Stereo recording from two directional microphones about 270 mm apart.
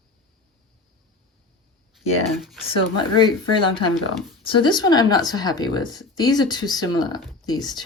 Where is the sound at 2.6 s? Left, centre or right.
Centre.